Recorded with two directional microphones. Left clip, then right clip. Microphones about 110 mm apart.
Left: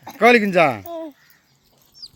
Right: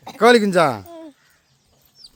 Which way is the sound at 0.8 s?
40° left (ahead or behind).